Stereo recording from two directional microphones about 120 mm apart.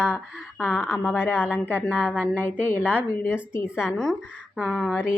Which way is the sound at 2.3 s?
15° left (ahead or behind).